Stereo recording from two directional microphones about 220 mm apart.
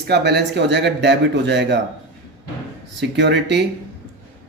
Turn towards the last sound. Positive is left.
turn(degrees=-50)  # may be behind; listen again after turning